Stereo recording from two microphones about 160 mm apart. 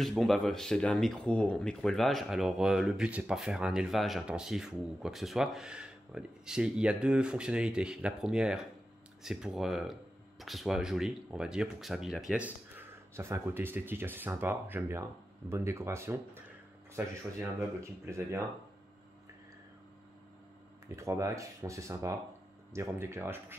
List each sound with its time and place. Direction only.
0.0 s speech: centre (ahead or behind); by 18.4 s 15° right (ahead or behind)
20.9 s speech: 20° right (ahead or behind)